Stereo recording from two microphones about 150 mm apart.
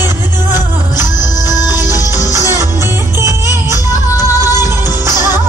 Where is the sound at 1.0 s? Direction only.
25° left (ahead or behind).